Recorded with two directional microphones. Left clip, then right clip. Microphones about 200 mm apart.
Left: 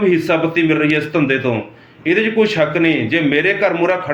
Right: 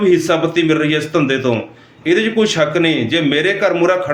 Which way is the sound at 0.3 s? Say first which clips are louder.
Right 1 dB; 20° right (ahead or behind).